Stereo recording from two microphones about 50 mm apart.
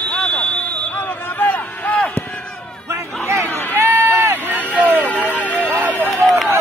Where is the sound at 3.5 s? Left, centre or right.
Left.